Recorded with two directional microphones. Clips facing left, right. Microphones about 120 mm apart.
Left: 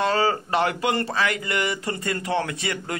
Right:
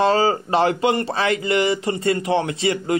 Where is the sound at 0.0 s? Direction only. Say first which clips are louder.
Right 4 dB; 25° right (ahead or behind).